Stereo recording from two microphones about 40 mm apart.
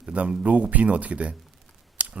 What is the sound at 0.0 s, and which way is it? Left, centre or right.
A man's voice, right.